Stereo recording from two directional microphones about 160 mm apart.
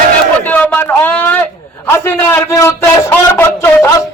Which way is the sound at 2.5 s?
20° left (ahead or behind).